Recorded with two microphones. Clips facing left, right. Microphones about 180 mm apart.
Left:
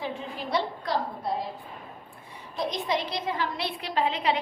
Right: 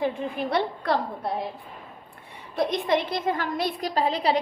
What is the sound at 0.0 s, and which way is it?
Speech, 60° right (ahead or behind).